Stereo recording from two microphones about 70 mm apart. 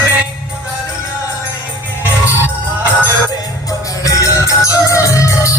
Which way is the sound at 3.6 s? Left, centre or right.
Left.